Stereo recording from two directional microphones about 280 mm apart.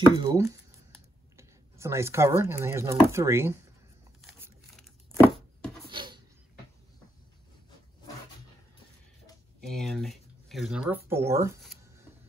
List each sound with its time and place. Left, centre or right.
0.0 s speech: centre
5.9 s a sound: centre
9.6 s speech: centre